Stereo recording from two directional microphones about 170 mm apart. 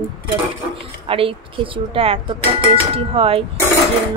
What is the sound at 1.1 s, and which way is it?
Dishes, 30° right (ahead or behind).